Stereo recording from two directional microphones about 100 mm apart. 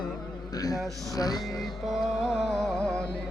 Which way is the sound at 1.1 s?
40° left (ahead or behind).